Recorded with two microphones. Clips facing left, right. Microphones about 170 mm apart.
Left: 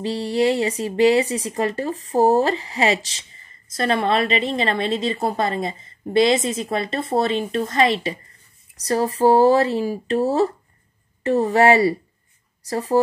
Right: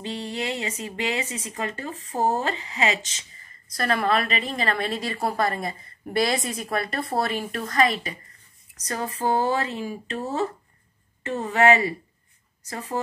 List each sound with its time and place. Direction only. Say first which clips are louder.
0.0 s speech: left 10 dB; 35° left (ahead or behind)